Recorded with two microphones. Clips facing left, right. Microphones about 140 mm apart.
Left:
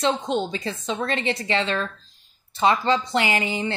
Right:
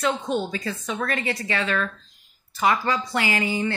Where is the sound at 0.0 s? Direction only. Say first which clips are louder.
Left 1 dB; 25° left (ahead or behind).